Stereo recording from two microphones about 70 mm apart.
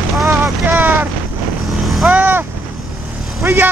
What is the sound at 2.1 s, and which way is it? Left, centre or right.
Speech, right.